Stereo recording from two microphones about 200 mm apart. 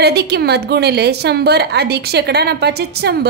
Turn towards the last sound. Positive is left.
turn(degrees=-55)  # may be behind; listen again after turning